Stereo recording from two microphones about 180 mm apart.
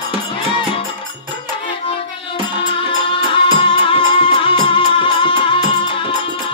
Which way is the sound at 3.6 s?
30° left (ahead or behind).